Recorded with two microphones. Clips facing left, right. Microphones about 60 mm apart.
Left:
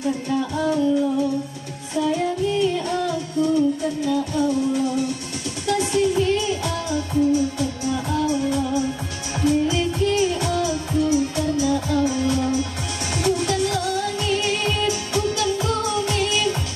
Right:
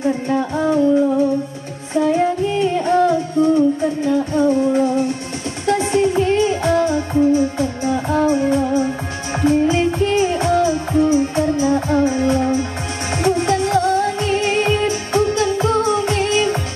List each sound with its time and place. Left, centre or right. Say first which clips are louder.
0.0 s music: right 5 dB; right
13.1 s music of asia: right 5 dB; right